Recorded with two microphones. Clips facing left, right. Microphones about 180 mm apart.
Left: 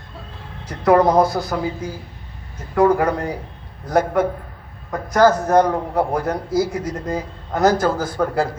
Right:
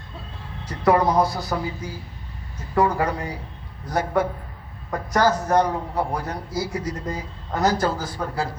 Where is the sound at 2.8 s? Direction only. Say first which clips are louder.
Left 6 dB; 45° left (ahead or behind).